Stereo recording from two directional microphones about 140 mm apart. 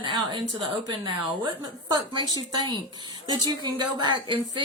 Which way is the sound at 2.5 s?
35° right (ahead or behind).